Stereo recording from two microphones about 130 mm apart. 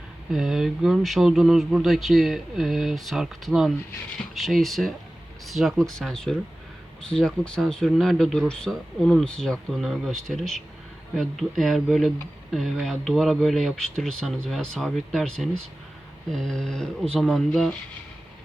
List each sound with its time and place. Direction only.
0.3 s speech: 5° right (ahead or behind)